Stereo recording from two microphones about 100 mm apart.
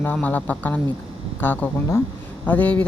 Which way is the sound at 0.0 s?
15° left (ahead or behind).